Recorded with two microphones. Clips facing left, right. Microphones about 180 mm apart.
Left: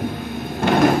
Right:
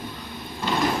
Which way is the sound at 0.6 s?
60° left (ahead or behind).